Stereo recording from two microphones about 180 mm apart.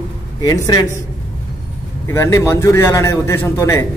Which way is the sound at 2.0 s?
15° left (ahead or behind).